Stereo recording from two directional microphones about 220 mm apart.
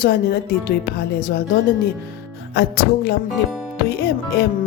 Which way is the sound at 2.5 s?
45° left (ahead or behind).